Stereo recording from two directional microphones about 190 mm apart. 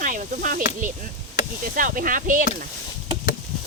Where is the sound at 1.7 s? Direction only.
45° right (ahead or behind).